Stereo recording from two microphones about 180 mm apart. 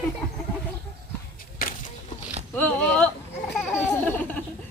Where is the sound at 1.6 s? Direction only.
55° left (ahead or behind).